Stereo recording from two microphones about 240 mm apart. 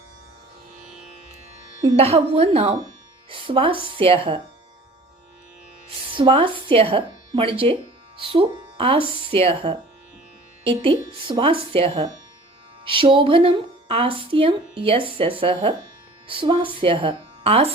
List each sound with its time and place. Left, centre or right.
1.8 s speech: right
6.1 s speech: right